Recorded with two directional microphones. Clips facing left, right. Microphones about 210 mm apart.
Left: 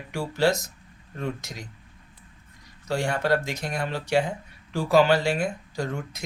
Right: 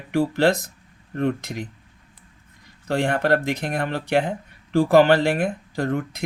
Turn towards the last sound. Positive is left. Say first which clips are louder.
# right 6 dB
turn(degrees=-55)  # may be behind; listen again after turning